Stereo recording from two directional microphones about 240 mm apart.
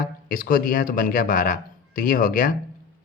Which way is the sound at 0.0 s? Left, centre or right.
Left.